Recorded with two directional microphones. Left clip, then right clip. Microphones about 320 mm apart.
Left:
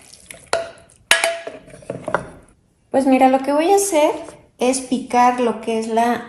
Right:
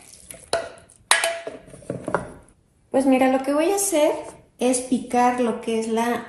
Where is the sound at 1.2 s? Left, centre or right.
Centre.